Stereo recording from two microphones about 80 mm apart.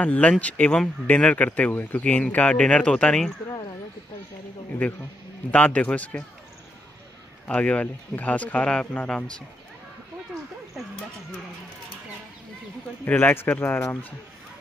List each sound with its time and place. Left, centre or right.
0.0 s speech: centre
5.5 s speech: centre
7.4 s speech: centre
13.0 s speech: left